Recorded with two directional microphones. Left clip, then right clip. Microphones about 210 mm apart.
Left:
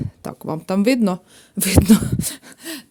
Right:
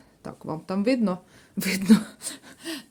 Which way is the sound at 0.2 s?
55° left (ahead or behind).